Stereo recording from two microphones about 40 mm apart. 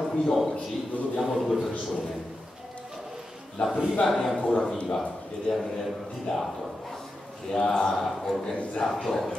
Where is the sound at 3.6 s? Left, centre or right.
Left.